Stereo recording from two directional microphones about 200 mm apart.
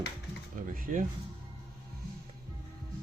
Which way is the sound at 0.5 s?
45° right (ahead or behind).